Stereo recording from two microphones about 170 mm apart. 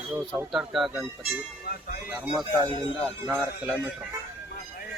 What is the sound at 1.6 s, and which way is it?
Speech, 60° left (ahead or behind).